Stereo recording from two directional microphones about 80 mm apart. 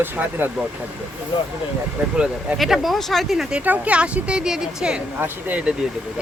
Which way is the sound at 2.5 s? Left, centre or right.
Centre.